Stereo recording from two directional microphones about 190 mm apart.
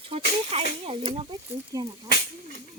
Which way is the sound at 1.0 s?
25° right (ahead or behind).